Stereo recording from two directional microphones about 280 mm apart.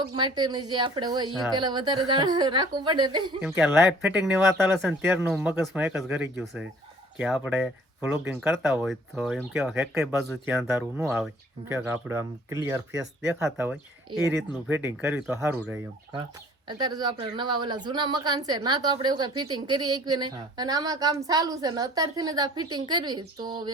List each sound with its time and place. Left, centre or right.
0.2 s a woman's voice: centre
3.4 s a woman's voice: centre